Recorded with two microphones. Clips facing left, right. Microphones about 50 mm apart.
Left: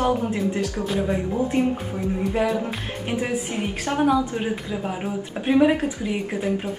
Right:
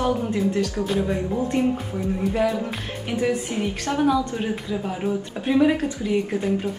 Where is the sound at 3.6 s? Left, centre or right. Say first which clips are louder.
Even; left.